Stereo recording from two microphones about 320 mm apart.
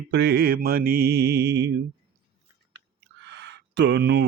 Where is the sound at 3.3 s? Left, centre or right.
Right.